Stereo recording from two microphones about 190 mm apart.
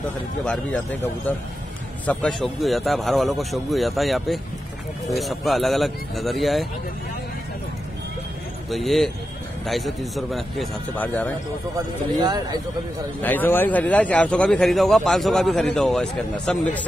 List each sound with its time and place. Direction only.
0.5 s a man's voice: 5° left (ahead or behind)
8.6 s a man's voice: centre (ahead or behind)
12.2 s speech: 20° right (ahead or behind)
13.2 s a man's voice: 10° left (ahead or behind)